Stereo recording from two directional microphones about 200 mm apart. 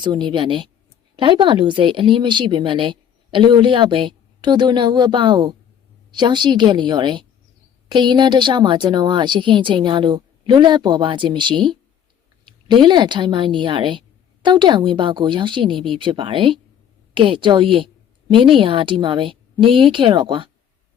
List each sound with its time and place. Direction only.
0.0 s speech: 25° right (ahead or behind)